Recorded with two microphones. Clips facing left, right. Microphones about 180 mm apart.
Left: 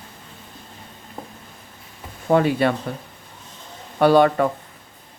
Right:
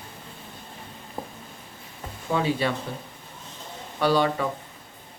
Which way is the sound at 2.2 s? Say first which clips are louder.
Left 7 dB; 55° left (ahead or behind).